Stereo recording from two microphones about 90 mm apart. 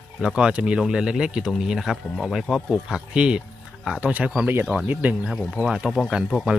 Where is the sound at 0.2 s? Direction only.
10° right (ahead or behind).